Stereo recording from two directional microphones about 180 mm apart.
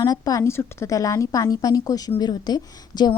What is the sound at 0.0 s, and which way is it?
A woman's voice, 20° left (ahead or behind).